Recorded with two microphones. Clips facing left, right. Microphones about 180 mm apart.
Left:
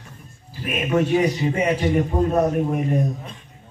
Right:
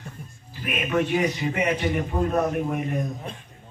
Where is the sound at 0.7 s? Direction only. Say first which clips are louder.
Left 4 dB; 25° left (ahead or behind).